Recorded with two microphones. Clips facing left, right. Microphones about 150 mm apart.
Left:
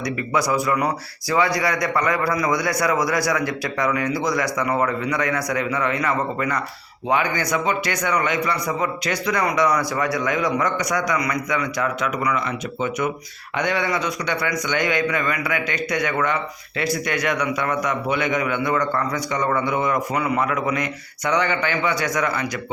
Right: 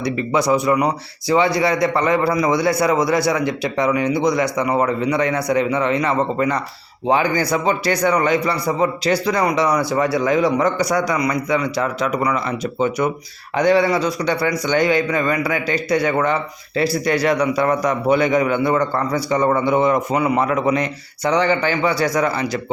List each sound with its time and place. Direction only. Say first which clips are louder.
0.0 s a man's voice: right 4 dB; 25° right (ahead or behind)